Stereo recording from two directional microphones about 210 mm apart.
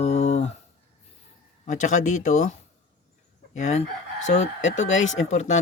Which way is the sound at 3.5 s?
35° left (ahead or behind).